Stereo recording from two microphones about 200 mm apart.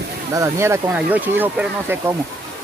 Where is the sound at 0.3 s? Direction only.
15° right (ahead or behind).